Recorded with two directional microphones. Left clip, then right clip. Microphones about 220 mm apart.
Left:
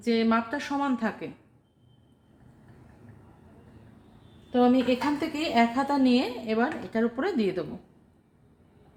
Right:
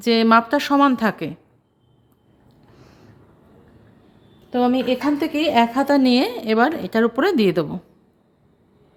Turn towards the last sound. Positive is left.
turn(degrees=-45)  # may be behind; listen again after turning